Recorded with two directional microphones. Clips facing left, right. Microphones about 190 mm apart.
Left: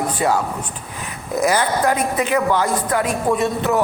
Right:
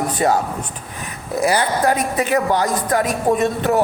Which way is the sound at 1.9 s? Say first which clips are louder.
Right 1 dB; 35° right (ahead or behind).